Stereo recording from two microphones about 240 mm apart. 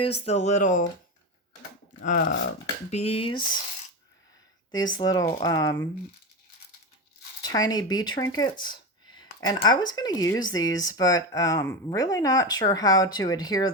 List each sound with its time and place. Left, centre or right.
0.0 s speech: left
1.9 s speech: left
4.9 s speech: centre
7.4 s speech: centre